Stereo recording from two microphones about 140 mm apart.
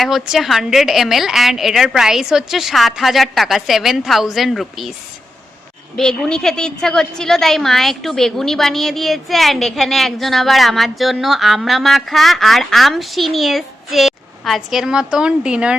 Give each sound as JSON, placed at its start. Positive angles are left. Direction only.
{"t": 0.0, "sound": "a woman's voice", "side_deg": 0}
{"t": 6.0, "sound": "a woman's voice", "side_deg": 5}